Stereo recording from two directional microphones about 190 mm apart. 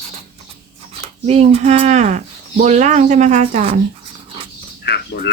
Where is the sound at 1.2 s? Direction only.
35° right (ahead or behind).